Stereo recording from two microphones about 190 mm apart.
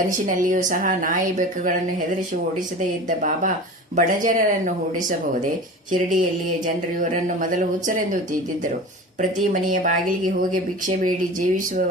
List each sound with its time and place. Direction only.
0.1 s a woman's voice: 45° right (ahead or behind)
3.1 s a woman's voice: 40° right (ahead or behind)
9.4 s a woman's voice: 45° right (ahead or behind)